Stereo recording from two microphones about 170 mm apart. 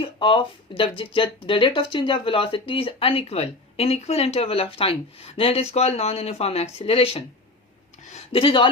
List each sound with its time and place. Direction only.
0.0 s speech: 30° left (ahead or behind)